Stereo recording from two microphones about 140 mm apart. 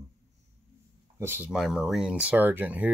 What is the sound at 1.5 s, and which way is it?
Speech, 5° right (ahead or behind).